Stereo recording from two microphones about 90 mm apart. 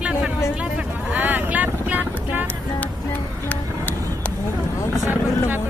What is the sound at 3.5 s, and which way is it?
Music, 15° left (ahead or behind).